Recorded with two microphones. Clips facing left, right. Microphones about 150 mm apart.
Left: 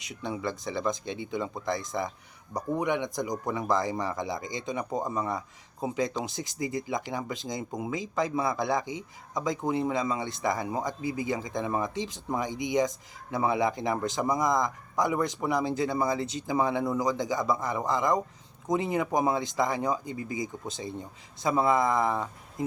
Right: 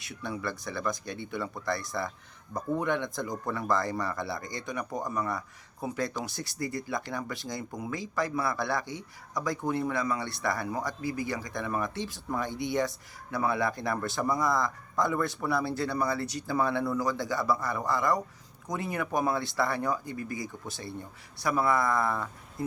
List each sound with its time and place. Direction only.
0.0 s speech: 20° left (ahead or behind)